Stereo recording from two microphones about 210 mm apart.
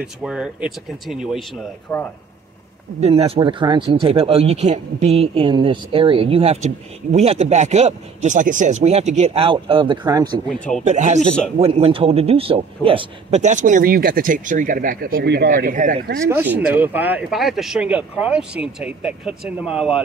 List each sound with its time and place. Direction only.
0.0 s speech: 5° right (ahead or behind)
3.0 s speech: 30° right (ahead or behind)
10.5 s speech: 5° left (ahead or behind)
10.9 s speech: 35° right (ahead or behind)
16.3 s speech: 10° right (ahead or behind)